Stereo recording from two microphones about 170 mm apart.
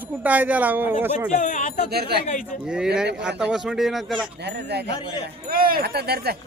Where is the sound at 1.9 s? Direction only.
70° right (ahead or behind).